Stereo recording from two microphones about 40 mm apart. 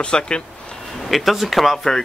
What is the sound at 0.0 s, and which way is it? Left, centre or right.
Speech, left.